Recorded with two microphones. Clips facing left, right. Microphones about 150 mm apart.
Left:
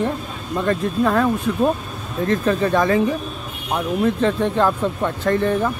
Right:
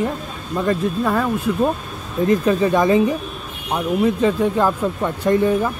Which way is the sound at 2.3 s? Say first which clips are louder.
Right 2 dB; 10° right (ahead or behind).